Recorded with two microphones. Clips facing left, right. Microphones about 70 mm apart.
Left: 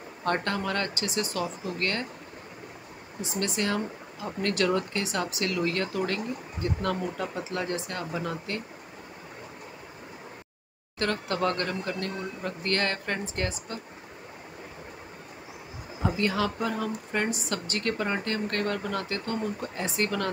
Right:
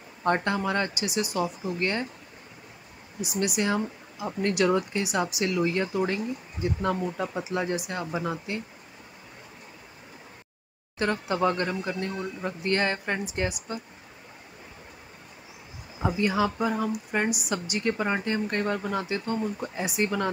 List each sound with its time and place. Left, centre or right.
0.2 s speech: centre
3.2 s speech: centre
11.0 s speech: centre
16.0 s speech: centre